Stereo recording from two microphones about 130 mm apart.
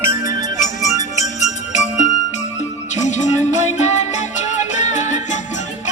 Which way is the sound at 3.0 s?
65° left (ahead or behind).